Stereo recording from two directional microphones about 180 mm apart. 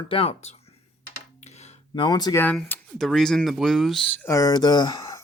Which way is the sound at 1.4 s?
40° left (ahead or behind).